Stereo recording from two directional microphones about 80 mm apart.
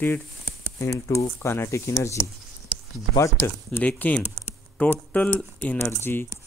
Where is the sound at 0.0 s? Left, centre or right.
Left.